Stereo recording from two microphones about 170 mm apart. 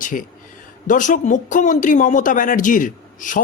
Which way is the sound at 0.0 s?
50° left (ahead or behind).